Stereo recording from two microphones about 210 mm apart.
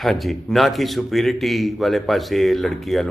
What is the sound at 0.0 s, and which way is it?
A man's voice, centre (ahead or behind).